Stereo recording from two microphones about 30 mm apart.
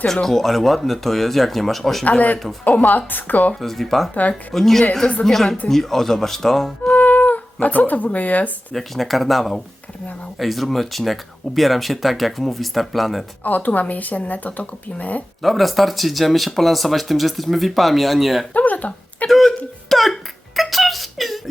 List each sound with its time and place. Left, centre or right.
0.1 s speech: centre
2.0 s speech: left
3.1 s a woman's voice: left
3.5 s speech: centre
4.1 s speech: left
4.5 s speech: centre
6.9 s cat: left
8.7 s speech: centre
13.4 s speech: left
15.4 s speech: centre
18.5 s speech: left
19.3 s a sound: centre